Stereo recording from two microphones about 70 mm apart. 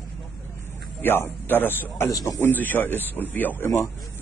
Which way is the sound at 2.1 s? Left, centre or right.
Left.